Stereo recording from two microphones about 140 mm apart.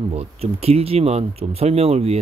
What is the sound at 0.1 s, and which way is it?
Speech, 45° right (ahead or behind).